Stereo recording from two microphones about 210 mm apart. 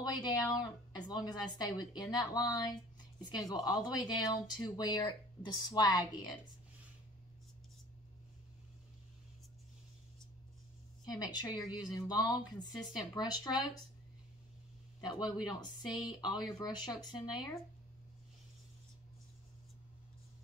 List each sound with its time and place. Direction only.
0.1 s speech: 20° left (ahead or behind)
11.1 s speech: 20° left (ahead or behind)
15.1 s speech: 5° right (ahead or behind)
15.4 s speech: 20° left (ahead or behind)